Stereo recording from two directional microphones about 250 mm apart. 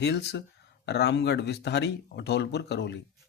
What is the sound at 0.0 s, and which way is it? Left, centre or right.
Speech, left.